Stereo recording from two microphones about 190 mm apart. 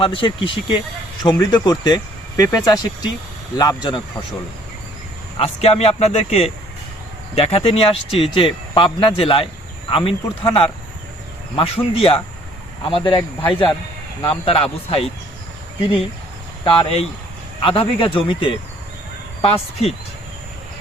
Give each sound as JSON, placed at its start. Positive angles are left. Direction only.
{"t": 0.0, "sound": "speech", "side_deg": 25}
{"t": 5.4, "sound": "speech", "side_deg": 30}
{"t": 16.6, "sound": "speech", "side_deg": 30}